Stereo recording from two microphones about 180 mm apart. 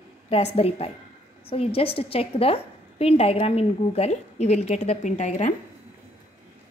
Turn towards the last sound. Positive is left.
turn(degrees=40)  # may be behind; listen again after turning